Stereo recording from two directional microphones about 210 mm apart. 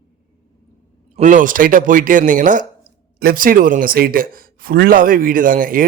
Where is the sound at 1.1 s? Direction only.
35° right (ahead or behind).